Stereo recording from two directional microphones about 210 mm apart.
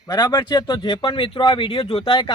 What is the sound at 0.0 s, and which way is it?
Speech, 20° left (ahead or behind).